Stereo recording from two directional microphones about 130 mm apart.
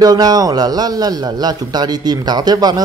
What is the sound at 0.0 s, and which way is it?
A man's voice, 30° right (ahead or behind).